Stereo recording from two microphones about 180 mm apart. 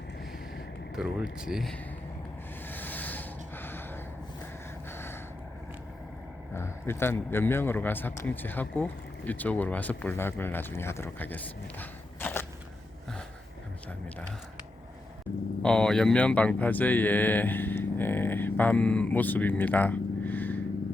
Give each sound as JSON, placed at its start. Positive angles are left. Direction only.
{"t": 0.9, "sound": "speech", "side_deg": -5}
{"t": 2.6, "sound": "sanding", "side_deg": 10}
{"t": 4.9, "sound": "gasp", "side_deg": 15}
{"t": 6.5, "sound": "a man's voice", "side_deg": 15}
{"t": 15.6, "sound": "speech", "side_deg": 5}